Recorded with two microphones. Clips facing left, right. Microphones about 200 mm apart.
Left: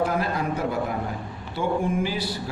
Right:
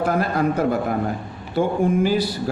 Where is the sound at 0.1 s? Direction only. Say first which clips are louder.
Right 5 dB; 50° right (ahead or behind).